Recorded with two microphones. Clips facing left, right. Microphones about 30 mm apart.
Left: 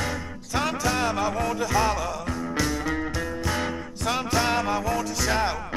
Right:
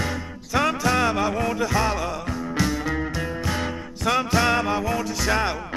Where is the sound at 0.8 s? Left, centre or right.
Centre.